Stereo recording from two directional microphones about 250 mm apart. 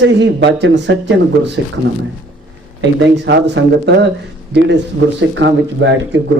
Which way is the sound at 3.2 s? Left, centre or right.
Right.